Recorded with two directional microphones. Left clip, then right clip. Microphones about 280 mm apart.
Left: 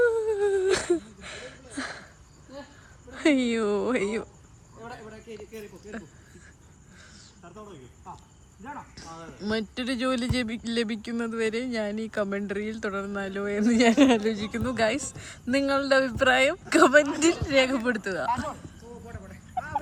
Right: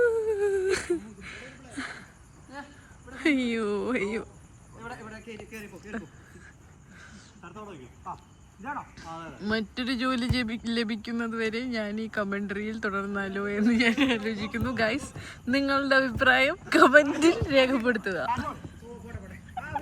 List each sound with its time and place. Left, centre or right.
0.0 s humming: centre
3.2 s speech: centre
7.4 s a sound: centre
9.0 s speech: centre